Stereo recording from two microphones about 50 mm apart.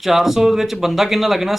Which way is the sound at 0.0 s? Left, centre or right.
Centre.